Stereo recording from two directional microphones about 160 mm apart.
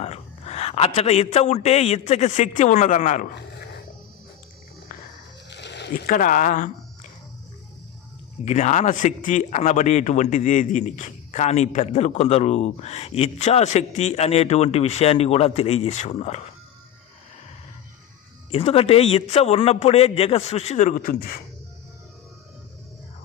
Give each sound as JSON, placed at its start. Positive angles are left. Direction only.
{"t": 0.0, "sound": "a man's voice", "side_deg": 40}
{"t": 5.5, "sound": "a sound", "side_deg": 90}
{"t": 8.4, "sound": "speech", "side_deg": 45}
{"t": 18.5, "sound": "a man's voice", "side_deg": 35}
{"t": 21.0, "sound": "speech", "side_deg": 65}